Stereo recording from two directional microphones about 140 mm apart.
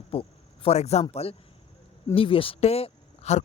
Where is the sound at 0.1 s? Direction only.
40° left (ahead or behind).